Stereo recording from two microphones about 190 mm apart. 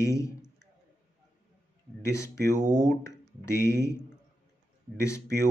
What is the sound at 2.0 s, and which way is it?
Speech, 15° left (ahead or behind).